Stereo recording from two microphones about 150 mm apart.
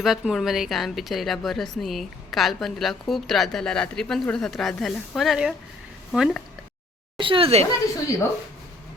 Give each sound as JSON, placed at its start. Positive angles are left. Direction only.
{"t": 0.0, "sound": "a woman's voice", "side_deg": 0}
{"t": 7.2, "sound": "a woman's voice", "side_deg": -35}